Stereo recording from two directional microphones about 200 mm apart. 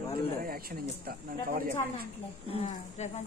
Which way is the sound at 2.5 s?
35° left (ahead or behind).